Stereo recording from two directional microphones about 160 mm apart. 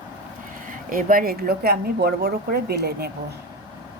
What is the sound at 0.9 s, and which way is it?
A woman's voice, 60° right (ahead or behind).